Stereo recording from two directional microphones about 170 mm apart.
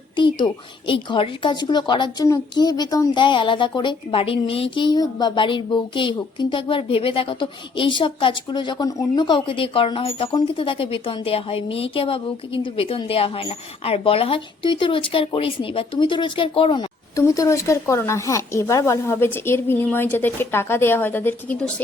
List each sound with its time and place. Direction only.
0.2 s speech: 30° left (ahead or behind)
17.2 s speech: 20° left (ahead or behind)